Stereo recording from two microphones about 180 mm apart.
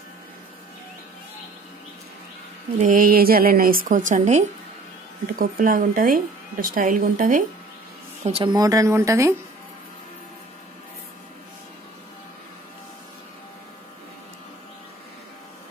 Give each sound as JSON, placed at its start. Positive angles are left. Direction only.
{"t": 2.9, "sound": "a woman's voice", "side_deg": -50}
{"t": 8.2, "sound": "speech", "side_deg": -35}
{"t": 8.5, "sound": "speech", "side_deg": -20}